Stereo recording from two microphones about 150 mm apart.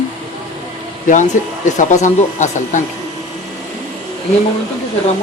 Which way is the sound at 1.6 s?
55° left (ahead or behind).